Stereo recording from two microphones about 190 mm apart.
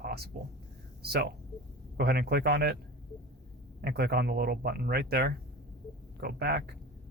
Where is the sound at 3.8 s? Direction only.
55° right (ahead or behind).